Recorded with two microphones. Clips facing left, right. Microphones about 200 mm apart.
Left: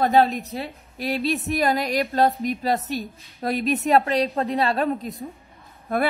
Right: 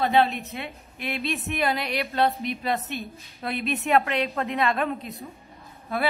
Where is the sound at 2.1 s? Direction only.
40° left (ahead or behind).